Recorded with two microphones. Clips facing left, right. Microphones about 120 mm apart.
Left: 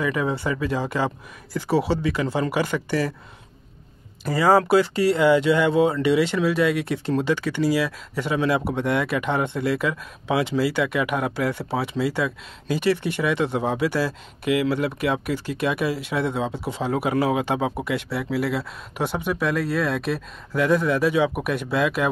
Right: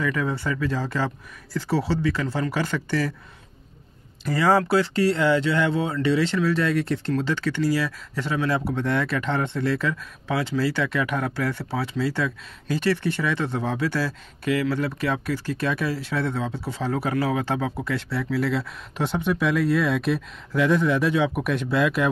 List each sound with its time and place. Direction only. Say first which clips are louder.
0.0 s speech: left 2 dB; 20° left (ahead or behind)
4.2 s speech: left 2 dB; 10° left (ahead or behind)